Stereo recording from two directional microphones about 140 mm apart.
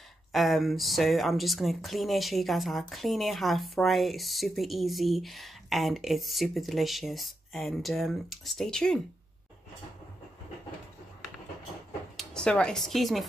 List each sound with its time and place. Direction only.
0.3 s speech: centre (ahead or behind)
12.2 s speech: 5° left (ahead or behind)